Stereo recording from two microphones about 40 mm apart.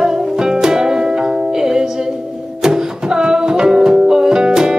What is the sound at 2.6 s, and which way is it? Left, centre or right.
Music, centre.